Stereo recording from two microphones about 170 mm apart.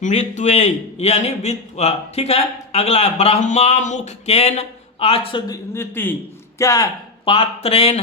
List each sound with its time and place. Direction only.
0.0 s a man's voice: 45° left (ahead or behind)
5.5 s a man's voice: 15° left (ahead or behind)
7.3 s a man's voice: 35° left (ahead or behind)